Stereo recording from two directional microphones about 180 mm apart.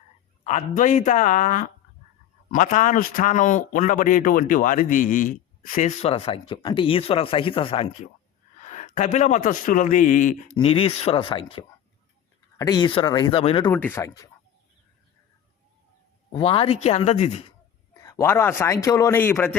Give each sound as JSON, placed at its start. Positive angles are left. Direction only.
{"t": 0.4, "sound": "a man's voice", "side_deg": 45}
{"t": 10.6, "sound": "speech", "side_deg": 30}
{"t": 13.7, "sound": "speech", "side_deg": 10}
{"t": 16.3, "sound": "speech", "side_deg": 30}
{"t": 18.0, "sound": "speech", "side_deg": 15}